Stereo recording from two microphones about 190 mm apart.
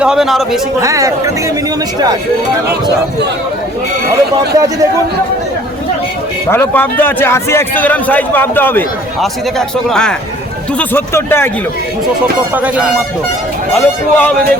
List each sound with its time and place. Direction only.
0.0 s speech: 5° right (ahead or behind)
0.8 s speech: 15° right (ahead or behind)
4.1 s speech: 20° right (ahead or behind)
6.5 s a man's voice: 10° left (ahead or behind)
12.5 s speech: 5° right (ahead or behind)
13.7 s speech: 5° left (ahead or behind)